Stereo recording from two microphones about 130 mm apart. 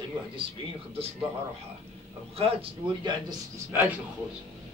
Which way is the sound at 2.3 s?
50° right (ahead or behind).